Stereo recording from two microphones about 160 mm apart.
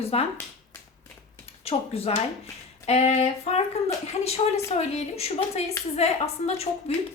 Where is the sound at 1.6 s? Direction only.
40° left (ahead or behind).